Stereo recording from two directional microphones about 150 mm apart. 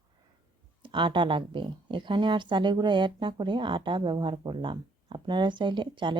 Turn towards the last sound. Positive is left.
turn(degrees=-30)  # may be behind; listen again after turning